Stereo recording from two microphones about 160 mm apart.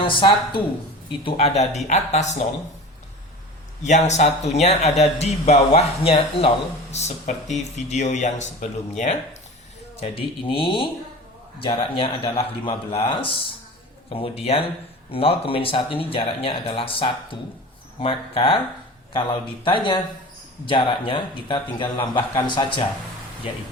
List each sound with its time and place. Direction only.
0.0 s a man's voice: 30° left (ahead or behind)
3.8 s a man's voice: 45° left (ahead or behind)
10.0 s speech: 35° left (ahead or behind)